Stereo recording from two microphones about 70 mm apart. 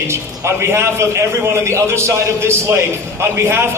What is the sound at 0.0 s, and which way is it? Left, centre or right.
A man's voice, right.